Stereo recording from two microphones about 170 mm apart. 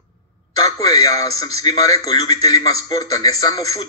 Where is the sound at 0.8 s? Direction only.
20° left (ahead or behind).